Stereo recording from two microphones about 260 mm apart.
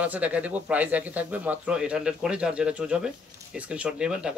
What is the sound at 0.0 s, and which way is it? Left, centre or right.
Speech, centre.